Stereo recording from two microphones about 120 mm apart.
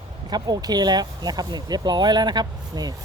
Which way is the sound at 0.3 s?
35° right (ahead or behind).